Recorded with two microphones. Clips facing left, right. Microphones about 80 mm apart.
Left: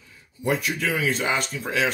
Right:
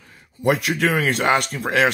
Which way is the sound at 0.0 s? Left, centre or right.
Right.